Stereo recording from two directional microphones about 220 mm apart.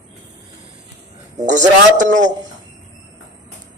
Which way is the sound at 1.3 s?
35° right (ahead or behind).